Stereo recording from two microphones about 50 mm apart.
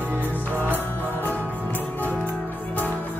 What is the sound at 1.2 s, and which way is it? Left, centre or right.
Music, left.